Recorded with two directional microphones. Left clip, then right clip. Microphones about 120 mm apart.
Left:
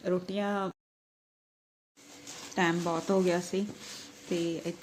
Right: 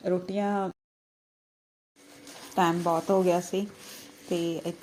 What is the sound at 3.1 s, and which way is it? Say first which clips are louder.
Speech: right 1 dB; 20° right (ahead or behind).